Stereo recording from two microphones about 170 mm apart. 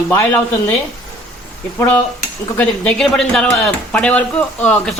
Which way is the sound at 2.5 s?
5° left (ahead or behind).